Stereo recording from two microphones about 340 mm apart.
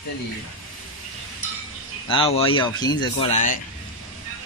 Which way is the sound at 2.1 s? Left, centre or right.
Centre.